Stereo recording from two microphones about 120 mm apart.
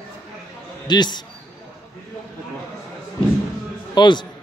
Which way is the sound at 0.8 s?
35° left (ahead or behind).